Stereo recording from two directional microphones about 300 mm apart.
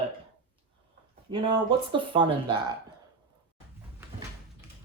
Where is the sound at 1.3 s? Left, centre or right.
Centre.